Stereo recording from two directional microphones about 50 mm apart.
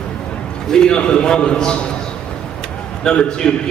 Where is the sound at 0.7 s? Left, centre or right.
Centre.